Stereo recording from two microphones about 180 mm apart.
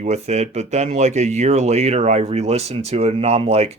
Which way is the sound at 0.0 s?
40° right (ahead or behind).